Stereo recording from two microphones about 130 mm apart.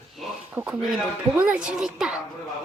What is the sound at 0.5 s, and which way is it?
Speech, 15° right (ahead or behind).